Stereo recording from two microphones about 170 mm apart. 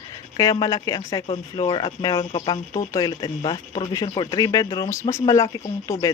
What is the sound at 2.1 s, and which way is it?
Speech, 35° left (ahead or behind).